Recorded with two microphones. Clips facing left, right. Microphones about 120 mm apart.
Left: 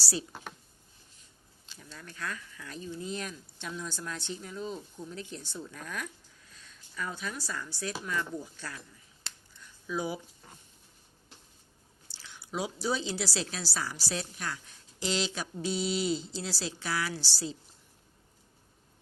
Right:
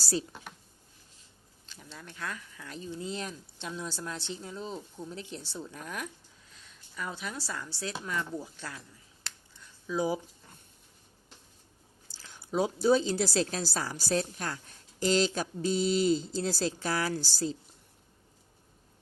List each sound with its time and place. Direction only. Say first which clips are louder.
0.0 s speech: right 4 dB; 45° right (ahead or behind)
1.7 s a sound: right 1 dB; 15° left (ahead or behind)
2.0 s speech: even; 20° right (ahead or behind)
12.2 s a woman's voice: right 6 dB; 45° right (ahead or behind)